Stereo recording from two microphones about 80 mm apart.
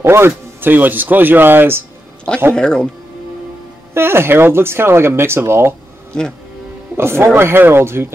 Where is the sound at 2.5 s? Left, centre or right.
Centre.